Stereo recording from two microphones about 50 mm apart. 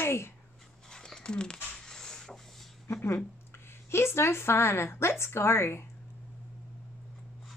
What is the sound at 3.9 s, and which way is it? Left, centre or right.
A woman's voice, left.